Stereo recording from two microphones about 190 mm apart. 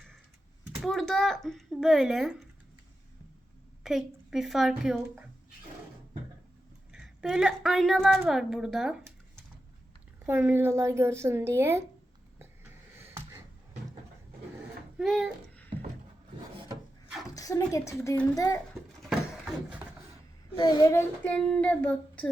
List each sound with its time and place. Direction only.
0.8 s speech: centre (ahead or behind)
3.8 s speech: centre (ahead or behind)
6.9 s a woman's voice: centre (ahead or behind)
10.2 s a woman's voice: 10° right (ahead or behind)
13.1 s a sound: 15° right (ahead or behind)
14.9 s speech: centre (ahead or behind)
17.3 s speech: 15° left (ahead or behind)
20.6 s speech: 20° left (ahead or behind)